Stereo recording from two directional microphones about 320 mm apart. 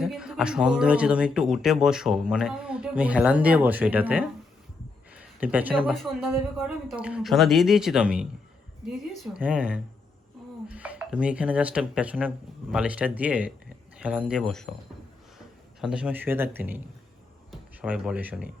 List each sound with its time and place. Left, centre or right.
0.0 s speech: centre
15.8 s speech: centre